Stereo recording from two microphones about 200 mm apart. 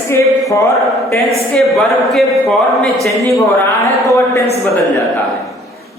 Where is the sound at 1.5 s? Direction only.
Centre (ahead or behind).